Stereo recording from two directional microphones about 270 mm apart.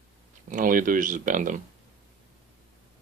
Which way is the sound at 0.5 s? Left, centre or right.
Right.